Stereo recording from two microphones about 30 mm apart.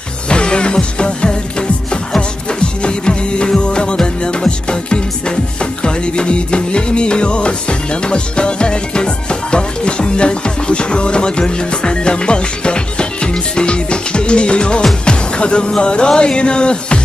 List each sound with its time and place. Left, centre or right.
0.3 s music: left